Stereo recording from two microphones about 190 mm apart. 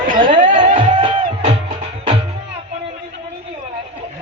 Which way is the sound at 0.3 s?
40° right (ahead or behind).